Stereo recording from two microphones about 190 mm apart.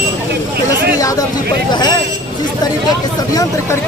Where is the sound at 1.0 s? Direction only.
20° left (ahead or behind).